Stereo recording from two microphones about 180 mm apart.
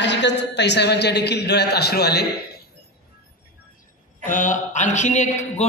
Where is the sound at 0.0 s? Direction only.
75° left (ahead or behind).